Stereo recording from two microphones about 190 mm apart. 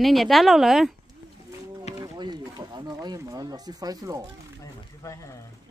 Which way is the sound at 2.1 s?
25° right (ahead or behind).